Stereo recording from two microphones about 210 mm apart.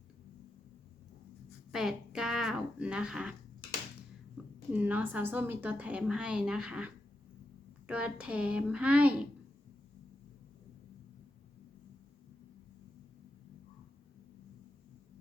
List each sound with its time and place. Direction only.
1.7 s speech: centre (ahead or behind)
4.7 s a woman's voice: 10° right (ahead or behind)